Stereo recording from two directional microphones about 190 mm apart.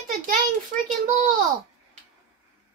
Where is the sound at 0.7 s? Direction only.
45° right (ahead or behind).